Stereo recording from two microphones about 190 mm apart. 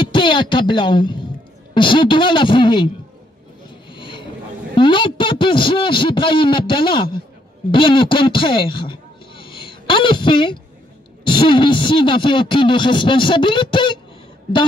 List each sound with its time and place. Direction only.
0.0 s speech: 25° left (ahead or behind)
3.9 s a sound: 25° left (ahead or behind)
4.7 s speech: 25° left (ahead or behind)